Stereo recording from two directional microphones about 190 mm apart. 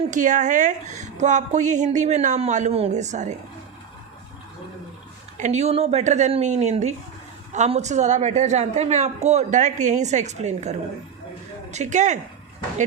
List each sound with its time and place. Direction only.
0.1 s a woman's voice: 40° right (ahead or behind)
5.4 s a woman's voice: 35° right (ahead or behind)